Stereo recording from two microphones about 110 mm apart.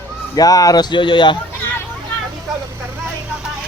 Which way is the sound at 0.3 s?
35° left (ahead or behind).